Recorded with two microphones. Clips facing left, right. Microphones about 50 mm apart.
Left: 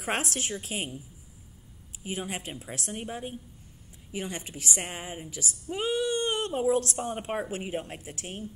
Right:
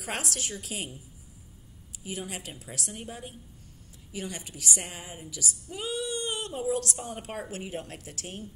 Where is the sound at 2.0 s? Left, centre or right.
Left.